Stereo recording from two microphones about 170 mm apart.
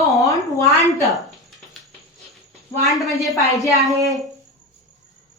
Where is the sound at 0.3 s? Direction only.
20° left (ahead or behind).